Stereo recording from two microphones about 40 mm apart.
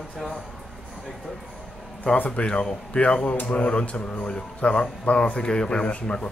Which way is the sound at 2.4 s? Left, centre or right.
Left.